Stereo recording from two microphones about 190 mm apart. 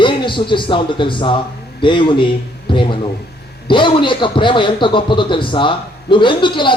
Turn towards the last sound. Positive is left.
turn(degrees=25)  # may be behind; listen again after turning